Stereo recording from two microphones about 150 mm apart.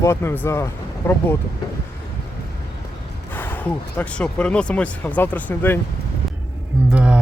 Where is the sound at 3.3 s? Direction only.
10° left (ahead or behind).